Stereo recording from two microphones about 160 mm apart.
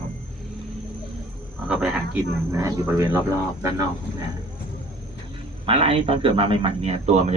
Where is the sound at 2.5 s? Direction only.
20° right (ahead or behind).